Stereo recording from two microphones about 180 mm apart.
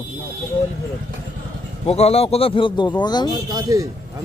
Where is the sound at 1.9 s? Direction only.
35° left (ahead or behind).